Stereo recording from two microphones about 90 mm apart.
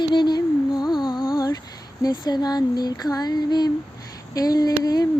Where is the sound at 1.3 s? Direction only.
45° left (ahead or behind).